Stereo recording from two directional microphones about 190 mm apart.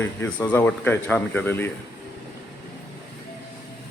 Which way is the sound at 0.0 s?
10° left (ahead or behind).